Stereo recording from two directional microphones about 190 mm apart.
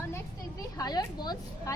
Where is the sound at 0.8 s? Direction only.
20° left (ahead or behind).